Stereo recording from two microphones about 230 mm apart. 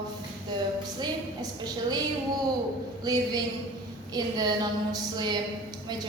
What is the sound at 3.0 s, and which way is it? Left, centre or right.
A woman's voice, centre.